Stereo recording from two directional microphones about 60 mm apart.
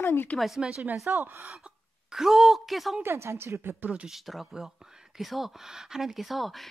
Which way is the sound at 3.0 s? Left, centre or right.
Right.